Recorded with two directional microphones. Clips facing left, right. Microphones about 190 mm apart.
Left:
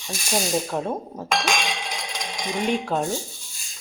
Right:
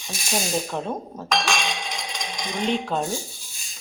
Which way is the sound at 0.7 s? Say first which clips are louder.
Left 2 dB; 5° left (ahead or behind).